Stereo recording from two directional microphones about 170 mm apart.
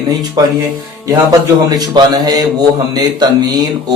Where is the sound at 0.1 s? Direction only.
20° right (ahead or behind).